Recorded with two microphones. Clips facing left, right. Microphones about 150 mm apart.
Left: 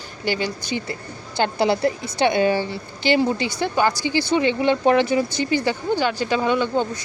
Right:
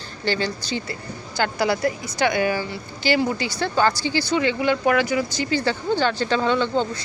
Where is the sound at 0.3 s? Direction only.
15° left (ahead or behind).